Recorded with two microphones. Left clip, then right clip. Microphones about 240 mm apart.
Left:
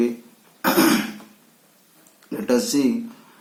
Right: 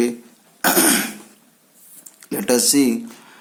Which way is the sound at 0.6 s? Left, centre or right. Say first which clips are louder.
Right 1 dB; right.